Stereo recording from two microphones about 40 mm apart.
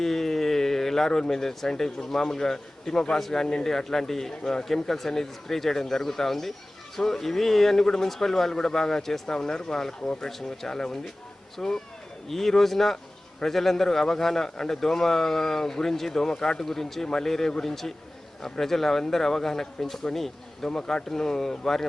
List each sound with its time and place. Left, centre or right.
0.0 s a sound: centre
1.3 s speech: centre
10.2 s speech: centre